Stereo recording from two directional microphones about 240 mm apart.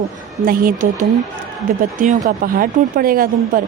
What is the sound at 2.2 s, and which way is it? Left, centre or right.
A woman's voice, right.